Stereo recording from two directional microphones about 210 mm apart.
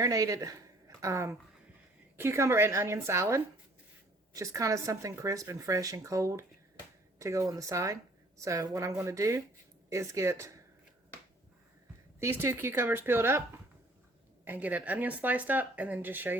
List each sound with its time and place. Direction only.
0.0 s a woman's voice: 15° right (ahead or behind)
12.4 s speech: 10° right (ahead or behind)
14.4 s speech: 10° right (ahead or behind)